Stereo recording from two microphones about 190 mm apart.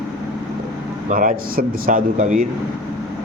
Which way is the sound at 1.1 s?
45° right (ahead or behind).